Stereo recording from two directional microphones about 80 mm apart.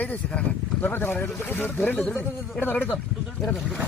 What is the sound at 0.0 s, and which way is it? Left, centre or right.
Speech, centre.